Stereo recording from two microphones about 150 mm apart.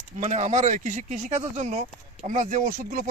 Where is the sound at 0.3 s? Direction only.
55° right (ahead or behind).